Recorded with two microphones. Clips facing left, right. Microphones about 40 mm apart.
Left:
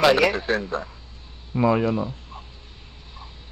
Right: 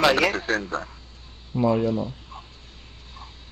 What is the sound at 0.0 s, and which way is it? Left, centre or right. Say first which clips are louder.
Speech: left 2 dB; centre.